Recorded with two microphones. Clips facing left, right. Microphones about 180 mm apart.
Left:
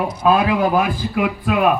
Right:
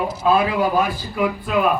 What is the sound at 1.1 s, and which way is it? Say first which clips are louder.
Speech: left 1 dB; 70° left (ahead or behind).